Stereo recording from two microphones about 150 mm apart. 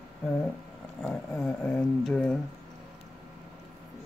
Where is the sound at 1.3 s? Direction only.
15° left (ahead or behind).